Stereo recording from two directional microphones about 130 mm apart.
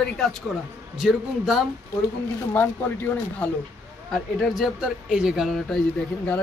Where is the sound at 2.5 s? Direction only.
10° left (ahead or behind).